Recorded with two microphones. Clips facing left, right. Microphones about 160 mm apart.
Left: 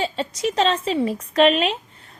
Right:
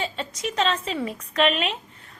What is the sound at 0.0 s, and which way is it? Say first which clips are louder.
A woman's voice: left 6 dB; 35° left (ahead or behind).